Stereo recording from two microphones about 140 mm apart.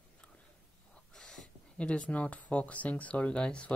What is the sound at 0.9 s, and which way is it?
Speech, 5° left (ahead or behind).